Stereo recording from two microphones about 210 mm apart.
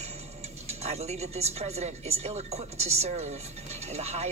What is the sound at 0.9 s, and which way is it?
Speech, 30° right (ahead or behind).